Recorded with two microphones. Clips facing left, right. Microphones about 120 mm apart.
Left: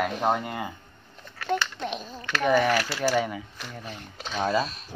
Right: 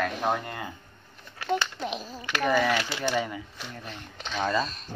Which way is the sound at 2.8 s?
20° right (ahead or behind).